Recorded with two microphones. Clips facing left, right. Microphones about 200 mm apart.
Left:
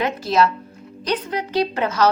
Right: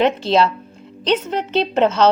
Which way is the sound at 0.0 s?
25° right (ahead or behind).